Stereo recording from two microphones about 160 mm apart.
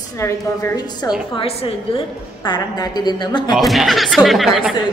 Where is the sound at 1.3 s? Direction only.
35° left (ahead or behind).